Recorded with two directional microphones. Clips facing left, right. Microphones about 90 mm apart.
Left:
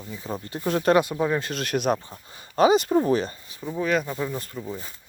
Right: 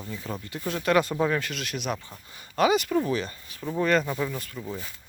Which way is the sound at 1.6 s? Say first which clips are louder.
Left 7 dB; 45° left (ahead or behind).